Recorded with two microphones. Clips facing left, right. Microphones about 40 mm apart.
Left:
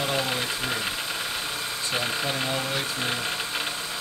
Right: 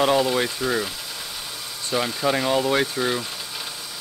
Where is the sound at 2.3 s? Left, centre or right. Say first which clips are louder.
Right 6 dB; right.